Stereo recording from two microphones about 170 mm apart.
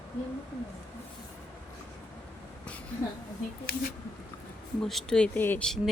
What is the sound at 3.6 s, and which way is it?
Speech, 65° left (ahead or behind).